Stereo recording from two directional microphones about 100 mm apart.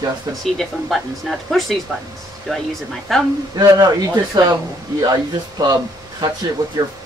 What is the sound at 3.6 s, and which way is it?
Speech, 45° right (ahead or behind).